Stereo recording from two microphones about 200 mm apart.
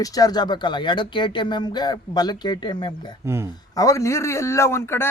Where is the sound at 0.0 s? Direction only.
20° left (ahead or behind).